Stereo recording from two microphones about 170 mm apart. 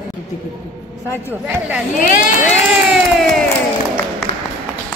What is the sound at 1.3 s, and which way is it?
Speech, 10° right (ahead or behind).